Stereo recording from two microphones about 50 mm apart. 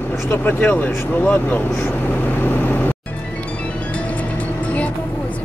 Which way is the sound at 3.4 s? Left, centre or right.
Left.